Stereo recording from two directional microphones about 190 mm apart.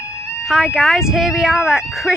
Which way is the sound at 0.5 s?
Centre (ahead or behind).